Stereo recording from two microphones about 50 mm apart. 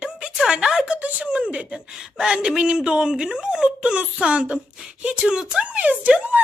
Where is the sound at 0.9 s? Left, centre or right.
Right.